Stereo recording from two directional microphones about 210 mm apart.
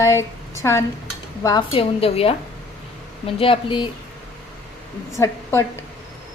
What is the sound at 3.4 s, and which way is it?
Speech, 25° left (ahead or behind).